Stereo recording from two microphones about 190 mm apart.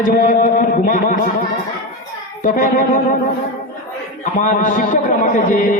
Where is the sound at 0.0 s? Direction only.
45° left (ahead or behind).